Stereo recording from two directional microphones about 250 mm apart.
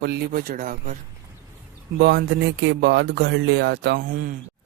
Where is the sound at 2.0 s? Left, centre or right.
Right.